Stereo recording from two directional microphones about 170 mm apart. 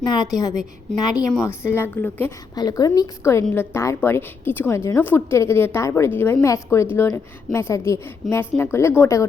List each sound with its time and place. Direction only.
0.0 s a woman's voice: 25° left (ahead or behind)
2.6 s a woman's voice: 20° left (ahead or behind)